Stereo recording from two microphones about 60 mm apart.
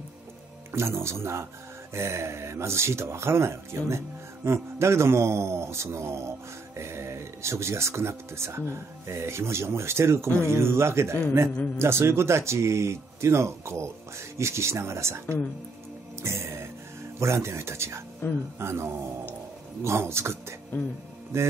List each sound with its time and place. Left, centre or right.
0.7 s a man's voice: right
11.5 s a man's voice: centre
11.8 s a man's voice: right
16.2 s music: right
17.2 s a man's voice: right